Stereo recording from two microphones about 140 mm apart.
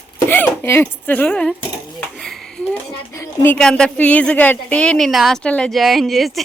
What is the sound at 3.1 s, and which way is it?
Speech, 20° left (ahead or behind).